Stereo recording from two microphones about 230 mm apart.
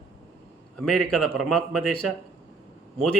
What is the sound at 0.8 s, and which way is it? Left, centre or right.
Speech, centre.